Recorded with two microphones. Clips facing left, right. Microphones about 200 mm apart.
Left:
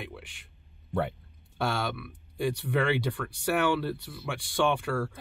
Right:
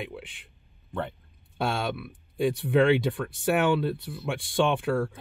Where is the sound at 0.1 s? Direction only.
20° right (ahead or behind).